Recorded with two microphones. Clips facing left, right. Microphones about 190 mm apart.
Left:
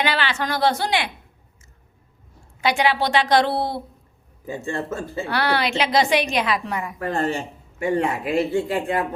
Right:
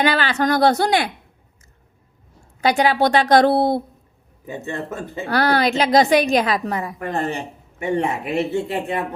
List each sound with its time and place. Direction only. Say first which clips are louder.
0.0 s a woman's voice: right 5 dB; 40° right (ahead or behind)
2.6 s a woman's voice: right 3 dB; 40° right (ahead or behind)
4.4 s speech: left 1 dB; 20° right (ahead or behind)
5.2 s a woman's voice: right 5 dB; 40° right (ahead or behind)
7.1 s speech: left 1 dB; 15° right (ahead or behind)